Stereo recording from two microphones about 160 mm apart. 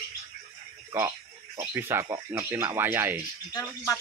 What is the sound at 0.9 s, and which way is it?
Speech, 20° right (ahead or behind).